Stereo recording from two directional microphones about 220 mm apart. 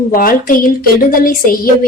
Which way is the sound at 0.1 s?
40° left (ahead or behind).